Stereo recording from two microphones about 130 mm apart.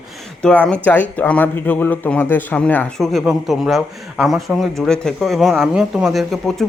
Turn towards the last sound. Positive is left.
turn(degrees=0)  # may be behind; listen again after turning